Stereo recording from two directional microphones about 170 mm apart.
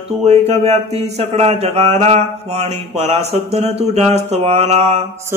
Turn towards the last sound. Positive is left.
turn(degrees=-40)  # may be behind; listen again after turning